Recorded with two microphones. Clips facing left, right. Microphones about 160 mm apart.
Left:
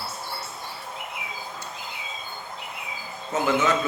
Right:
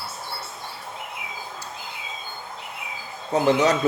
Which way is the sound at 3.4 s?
40° right (ahead or behind).